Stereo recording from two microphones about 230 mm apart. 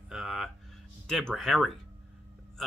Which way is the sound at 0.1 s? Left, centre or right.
Centre.